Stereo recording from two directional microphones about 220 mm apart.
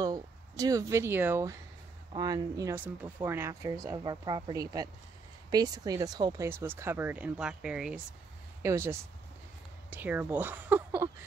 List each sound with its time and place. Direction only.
0.0 s speech: 15° right (ahead or behind)